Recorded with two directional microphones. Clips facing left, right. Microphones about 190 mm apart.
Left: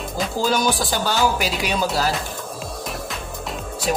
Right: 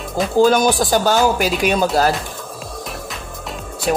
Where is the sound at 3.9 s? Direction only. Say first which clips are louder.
Right 4 dB; 55° right (ahead or behind).